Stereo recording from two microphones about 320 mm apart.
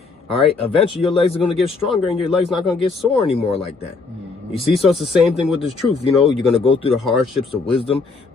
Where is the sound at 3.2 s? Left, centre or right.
Centre.